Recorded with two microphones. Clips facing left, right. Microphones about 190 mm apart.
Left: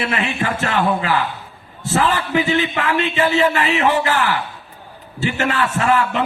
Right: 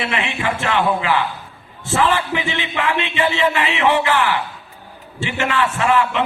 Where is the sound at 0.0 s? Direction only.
40° left (ahead or behind).